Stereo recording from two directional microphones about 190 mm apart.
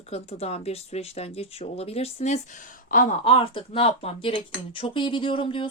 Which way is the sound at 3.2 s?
30° left (ahead or behind).